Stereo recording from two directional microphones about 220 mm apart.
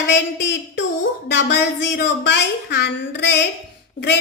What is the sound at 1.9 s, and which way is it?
A woman's voice, 50° left (ahead or behind).